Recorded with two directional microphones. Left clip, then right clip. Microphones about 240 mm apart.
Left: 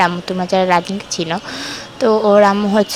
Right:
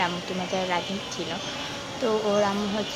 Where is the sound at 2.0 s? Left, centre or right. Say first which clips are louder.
Left 13 dB; left.